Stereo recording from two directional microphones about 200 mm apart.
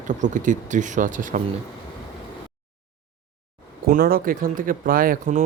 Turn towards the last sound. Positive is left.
turn(degrees=-45)  # may be behind; listen again after turning